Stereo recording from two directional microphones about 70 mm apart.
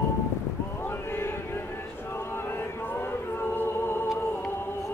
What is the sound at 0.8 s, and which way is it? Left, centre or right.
Chant, left.